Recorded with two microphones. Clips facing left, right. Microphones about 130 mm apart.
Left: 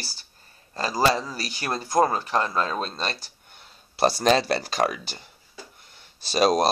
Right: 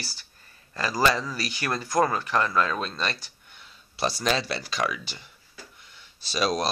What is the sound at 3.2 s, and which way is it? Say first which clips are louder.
Speech: left 1 dB; 45° left (ahead or behind).